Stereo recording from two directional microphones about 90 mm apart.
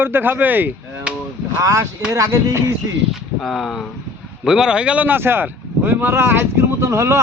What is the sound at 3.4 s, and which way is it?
Speech, 5° left (ahead or behind).